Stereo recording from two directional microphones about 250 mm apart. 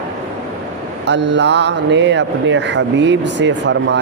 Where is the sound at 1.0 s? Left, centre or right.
Right.